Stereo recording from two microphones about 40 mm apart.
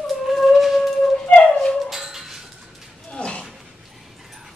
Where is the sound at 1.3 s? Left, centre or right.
Left.